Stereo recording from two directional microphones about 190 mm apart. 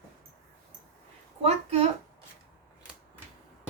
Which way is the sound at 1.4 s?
30° right (ahead or behind).